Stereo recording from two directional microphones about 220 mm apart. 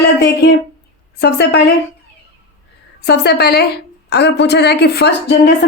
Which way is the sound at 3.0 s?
50° left (ahead or behind).